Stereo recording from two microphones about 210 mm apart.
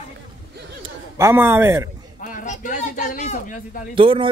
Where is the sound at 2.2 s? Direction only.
40° left (ahead or behind).